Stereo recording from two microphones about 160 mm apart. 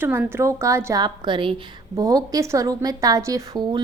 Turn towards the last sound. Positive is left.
turn(degrees=-25)  # may be behind; listen again after turning